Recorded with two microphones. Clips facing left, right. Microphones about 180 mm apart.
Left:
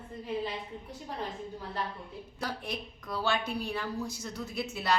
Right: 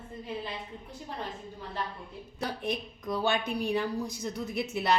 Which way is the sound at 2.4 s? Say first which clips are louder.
Right 4 dB; 20° right (ahead or behind).